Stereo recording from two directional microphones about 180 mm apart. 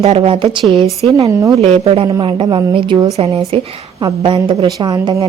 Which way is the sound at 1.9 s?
30° right (ahead or behind).